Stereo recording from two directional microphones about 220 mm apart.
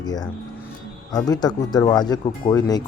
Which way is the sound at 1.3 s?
20° left (ahead or behind).